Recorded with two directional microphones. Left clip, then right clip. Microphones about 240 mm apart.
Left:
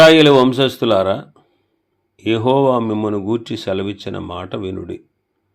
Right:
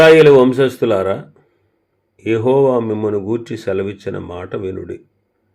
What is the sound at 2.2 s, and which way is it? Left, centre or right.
Speech, left.